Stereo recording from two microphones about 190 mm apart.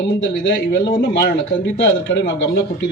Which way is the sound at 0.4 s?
65° left (ahead or behind).